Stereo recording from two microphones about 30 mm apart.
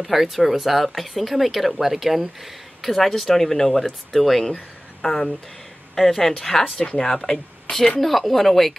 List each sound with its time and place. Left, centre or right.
0.0 s speech: centre
5.0 s a woman's voice: centre